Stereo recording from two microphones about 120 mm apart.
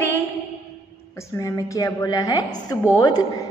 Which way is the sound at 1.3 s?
30° left (ahead or behind).